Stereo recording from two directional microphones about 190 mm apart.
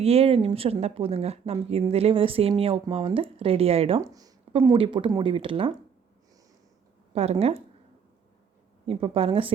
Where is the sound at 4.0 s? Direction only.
20° right (ahead or behind).